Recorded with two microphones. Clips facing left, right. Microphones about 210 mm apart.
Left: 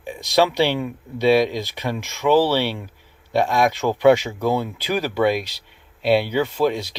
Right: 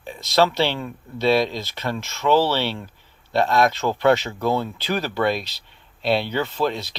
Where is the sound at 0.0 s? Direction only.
15° left (ahead or behind).